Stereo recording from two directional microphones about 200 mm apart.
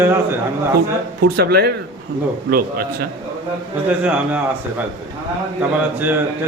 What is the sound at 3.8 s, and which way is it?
Speech, 5° right (ahead or behind).